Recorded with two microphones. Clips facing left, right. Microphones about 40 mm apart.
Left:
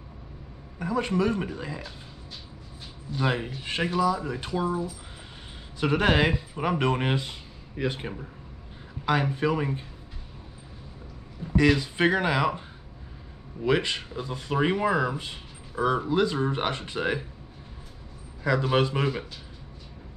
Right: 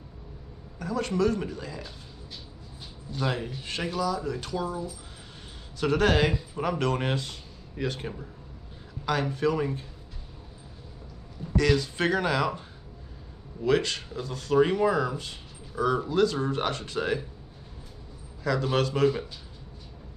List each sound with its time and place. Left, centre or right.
0.7 s speech: left
3.2 s speech: left
11.5 s speech: centre
18.4 s speech: centre